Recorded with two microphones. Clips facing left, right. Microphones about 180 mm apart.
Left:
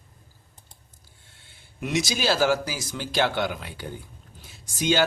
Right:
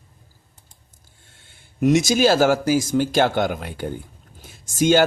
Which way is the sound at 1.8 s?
45° right (ahead or behind).